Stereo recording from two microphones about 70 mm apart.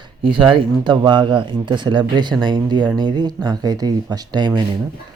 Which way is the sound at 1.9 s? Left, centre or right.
Right.